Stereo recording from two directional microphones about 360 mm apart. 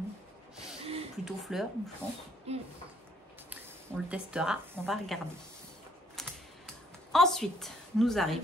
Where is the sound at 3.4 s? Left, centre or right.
Centre.